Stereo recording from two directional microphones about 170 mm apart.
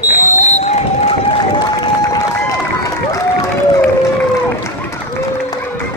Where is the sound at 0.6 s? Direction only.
40° left (ahead or behind).